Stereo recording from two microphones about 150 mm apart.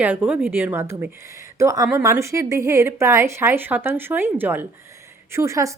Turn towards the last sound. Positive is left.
turn(degrees=-20)  # may be behind; listen again after turning